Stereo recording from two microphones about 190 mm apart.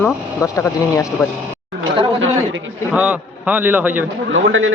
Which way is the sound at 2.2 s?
90° right.